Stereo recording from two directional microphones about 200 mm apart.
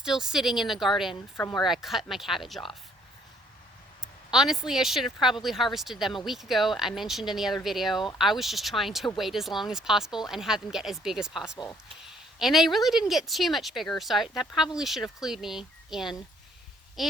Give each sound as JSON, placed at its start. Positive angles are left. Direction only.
{"t": 0.0, "sound": "speech", "side_deg": -5}
{"t": 1.4, "sound": "speech", "side_deg": 20}
{"t": 1.6, "sound": "speech", "side_deg": 0}
{"t": 4.0, "sound": "speech", "side_deg": -5}